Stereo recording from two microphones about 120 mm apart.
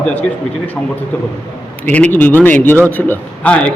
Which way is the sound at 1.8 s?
15° left (ahead or behind).